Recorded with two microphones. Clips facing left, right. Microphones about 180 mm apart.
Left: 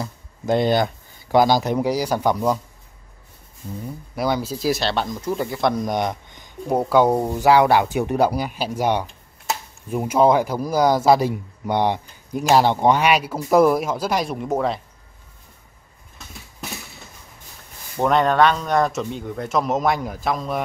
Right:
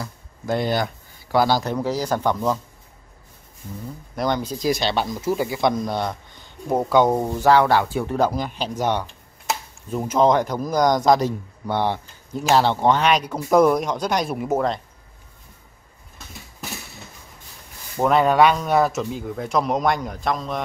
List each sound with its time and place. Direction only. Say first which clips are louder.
0.0 s a sound: left 3 dB; 20° left (ahead or behind)
1.3 s speech: left 3 dB; 15° left (ahead or behind)
4.1 s speech: left 1 dB; 5° left (ahead or behind)
5.9 s speech: left 2 dB; 15° left (ahead or behind); by 14.8 s centre (ahead or behind)
17.9 s speech: right 1 dB; 5° right (ahead or behind)